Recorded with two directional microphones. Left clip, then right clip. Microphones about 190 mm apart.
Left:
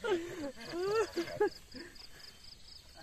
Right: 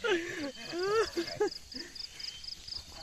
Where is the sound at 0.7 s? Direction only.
35° right (ahead or behind).